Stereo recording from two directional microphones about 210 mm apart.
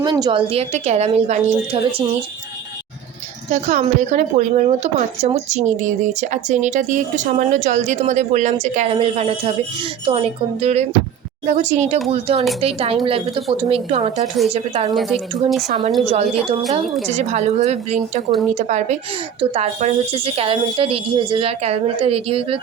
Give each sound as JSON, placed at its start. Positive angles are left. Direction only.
{"t": 0.0, "sound": "a woman's voice", "side_deg": -20}
{"t": 3.5, "sound": "a woman's voice", "side_deg": -35}
{"t": 14.9, "sound": "speech", "side_deg": 0}
{"t": 17.1, "sound": "a woman's voice", "side_deg": -35}